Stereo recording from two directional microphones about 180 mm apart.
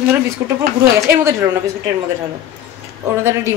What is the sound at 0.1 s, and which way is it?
Speech, 15° right (ahead or behind).